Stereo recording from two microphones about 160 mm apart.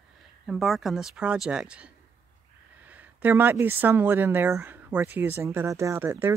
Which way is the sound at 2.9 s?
10° right (ahead or behind).